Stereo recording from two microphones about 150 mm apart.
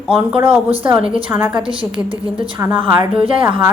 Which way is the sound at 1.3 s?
10° right (ahead or behind).